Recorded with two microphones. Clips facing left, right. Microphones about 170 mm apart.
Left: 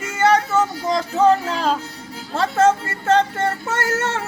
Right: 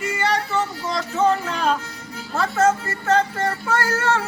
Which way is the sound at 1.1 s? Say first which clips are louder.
Left 3 dB; 35° left (ahead or behind).